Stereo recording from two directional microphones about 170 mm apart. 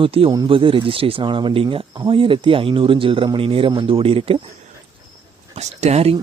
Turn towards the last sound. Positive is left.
turn(degrees=-40)  # may be behind; listen again after turning